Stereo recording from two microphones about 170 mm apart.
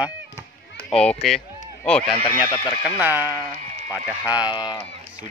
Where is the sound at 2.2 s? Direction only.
20° left (ahead or behind).